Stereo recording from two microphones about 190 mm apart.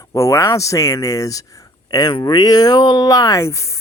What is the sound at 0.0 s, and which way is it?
Speech, 15° left (ahead or behind).